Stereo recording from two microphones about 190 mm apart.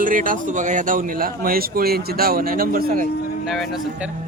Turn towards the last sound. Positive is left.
turn(degrees=0)  # may be behind; listen again after turning